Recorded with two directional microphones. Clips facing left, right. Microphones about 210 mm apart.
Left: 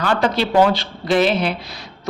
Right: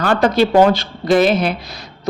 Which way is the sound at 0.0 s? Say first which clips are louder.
Right 5 dB; 45° right (ahead or behind).